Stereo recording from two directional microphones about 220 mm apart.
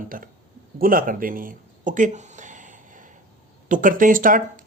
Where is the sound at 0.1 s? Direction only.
40° right (ahead or behind).